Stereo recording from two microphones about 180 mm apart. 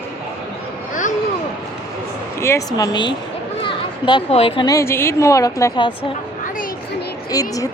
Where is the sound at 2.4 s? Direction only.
20° left (ahead or behind); by 4.6 s 35° left (ahead or behind).